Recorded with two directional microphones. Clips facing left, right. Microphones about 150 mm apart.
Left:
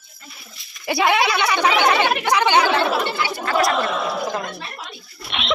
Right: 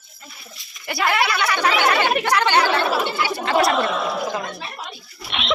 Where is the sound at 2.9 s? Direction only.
5° right (ahead or behind).